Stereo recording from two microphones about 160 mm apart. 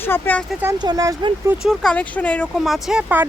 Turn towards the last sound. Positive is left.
turn(degrees=-10)  # may be behind; listen again after turning